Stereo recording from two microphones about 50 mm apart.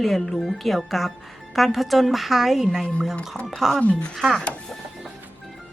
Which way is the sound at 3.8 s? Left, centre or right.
Left.